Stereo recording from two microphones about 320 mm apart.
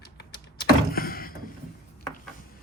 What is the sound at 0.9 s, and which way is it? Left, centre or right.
Door, left.